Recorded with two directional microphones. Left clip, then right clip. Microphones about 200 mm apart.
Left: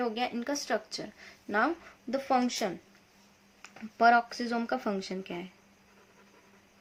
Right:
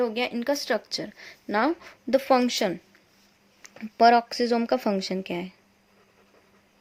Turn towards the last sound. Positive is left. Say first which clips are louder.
# right 8 dB
turn(degrees=-40)  # may be behind; listen again after turning